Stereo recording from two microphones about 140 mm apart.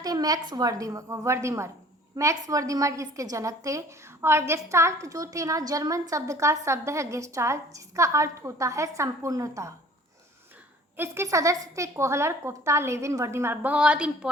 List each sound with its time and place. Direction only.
0.0 s a woman's voice: 25° right (ahead or behind)
10.9 s a woman's voice: 15° right (ahead or behind)